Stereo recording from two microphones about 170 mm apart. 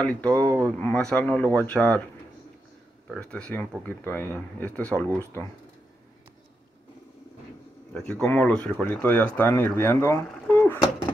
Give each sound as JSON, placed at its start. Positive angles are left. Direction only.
{"t": 0.0, "sound": "speech", "side_deg": 5}
{"t": 0.3, "sound": "speech", "side_deg": -20}
{"t": 0.7, "sound": "speech", "side_deg": 5}
{"t": 3.1, "sound": "speech", "side_deg": 5}
{"t": 7.9, "sound": "speech", "side_deg": 5}
{"t": 10.4, "sound": "a sound", "side_deg": 10}